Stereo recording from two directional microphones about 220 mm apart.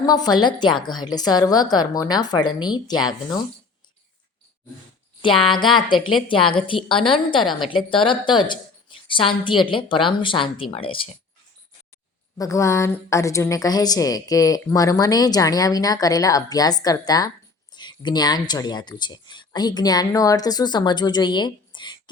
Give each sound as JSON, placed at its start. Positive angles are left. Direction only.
{"t": 0.0, "sound": "a woman's voice", "side_deg": 20}
{"t": 5.2, "sound": "a woman's voice", "side_deg": 20}
{"t": 12.4, "sound": "a woman's voice", "side_deg": 15}